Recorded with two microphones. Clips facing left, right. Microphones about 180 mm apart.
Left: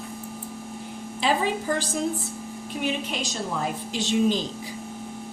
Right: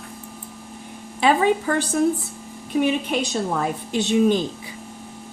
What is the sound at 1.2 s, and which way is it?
A woman's voice, 60° right (ahead or behind).